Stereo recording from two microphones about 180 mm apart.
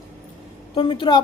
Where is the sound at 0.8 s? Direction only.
30° left (ahead or behind).